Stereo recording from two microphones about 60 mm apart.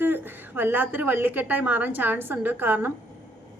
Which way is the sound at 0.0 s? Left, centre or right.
Right.